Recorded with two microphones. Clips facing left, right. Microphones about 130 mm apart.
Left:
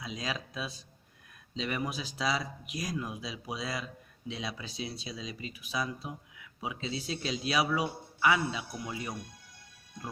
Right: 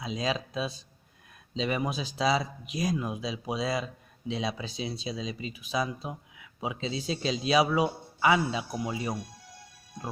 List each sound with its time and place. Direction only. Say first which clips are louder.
0.0 s speech: right 6 dB; 25° right (ahead or behind)